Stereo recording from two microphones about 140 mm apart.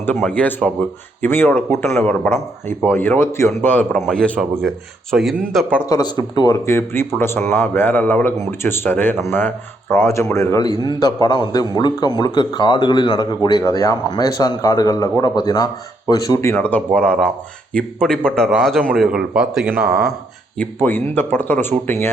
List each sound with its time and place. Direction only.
0.2 s speech: 10° left (ahead or behind)
3.9 s speech: 5° left (ahead or behind)
5.9 s speech: 30° left (ahead or behind)
6.7 s speech: 15° left (ahead or behind)
16.6 s speech: 10° left (ahead or behind); by 20.1 s 10° right (ahead or behind)
20.8 s speech: 15° left (ahead or behind)